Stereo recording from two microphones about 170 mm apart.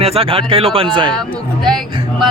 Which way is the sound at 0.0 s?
35° right (ahead or behind).